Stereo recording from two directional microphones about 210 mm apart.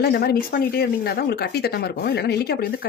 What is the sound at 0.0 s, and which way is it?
Speech, 50° left (ahead or behind).